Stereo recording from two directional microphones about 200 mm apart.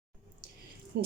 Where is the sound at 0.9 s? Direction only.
55° right (ahead or behind).